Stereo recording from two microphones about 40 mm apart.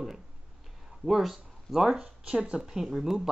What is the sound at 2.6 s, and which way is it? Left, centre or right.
Speech, centre.